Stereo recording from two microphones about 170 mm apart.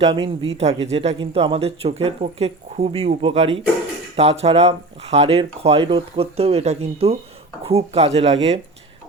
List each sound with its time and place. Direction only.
0.0 s speech: 35° right (ahead or behind)